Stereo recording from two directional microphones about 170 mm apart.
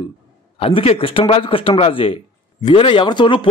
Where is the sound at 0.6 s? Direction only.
35° left (ahead or behind).